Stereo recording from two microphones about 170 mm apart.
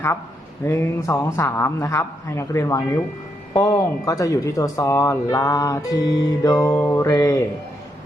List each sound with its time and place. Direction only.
0.6 s a man's voice: 15° left (ahead or behind)